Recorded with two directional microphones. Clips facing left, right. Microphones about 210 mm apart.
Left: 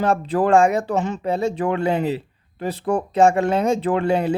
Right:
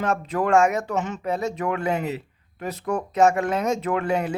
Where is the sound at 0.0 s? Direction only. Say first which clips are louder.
Left 5 dB; 30° left (ahead or behind).